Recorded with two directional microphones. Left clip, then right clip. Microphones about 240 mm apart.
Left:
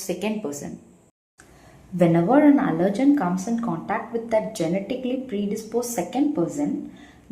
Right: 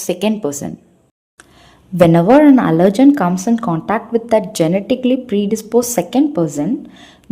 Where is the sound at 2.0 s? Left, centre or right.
Right.